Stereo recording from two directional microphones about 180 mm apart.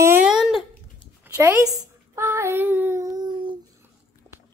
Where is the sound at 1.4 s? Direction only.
15° right (ahead or behind).